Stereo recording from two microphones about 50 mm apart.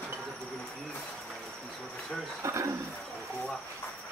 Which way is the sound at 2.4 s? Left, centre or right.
Right.